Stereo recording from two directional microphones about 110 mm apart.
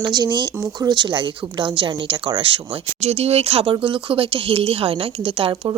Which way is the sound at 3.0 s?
70° right (ahead or behind).